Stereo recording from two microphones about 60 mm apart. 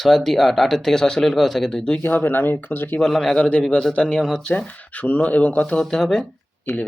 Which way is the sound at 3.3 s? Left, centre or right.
Left.